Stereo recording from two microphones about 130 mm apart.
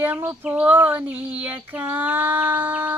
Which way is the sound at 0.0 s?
15° right (ahead or behind).